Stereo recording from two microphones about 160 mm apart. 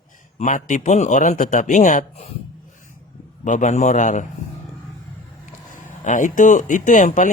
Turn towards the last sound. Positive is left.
turn(degrees=50)  # may be behind; listen again after turning